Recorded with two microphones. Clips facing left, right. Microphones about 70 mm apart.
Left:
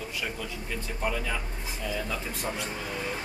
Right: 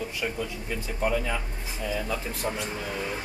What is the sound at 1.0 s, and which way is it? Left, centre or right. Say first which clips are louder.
Speech: right 4 dB; centre.